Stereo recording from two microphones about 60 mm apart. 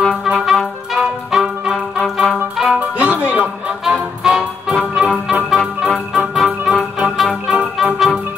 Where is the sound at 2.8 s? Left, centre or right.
Right.